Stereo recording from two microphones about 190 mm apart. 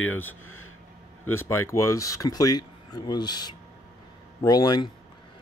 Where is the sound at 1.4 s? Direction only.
15° left (ahead or behind).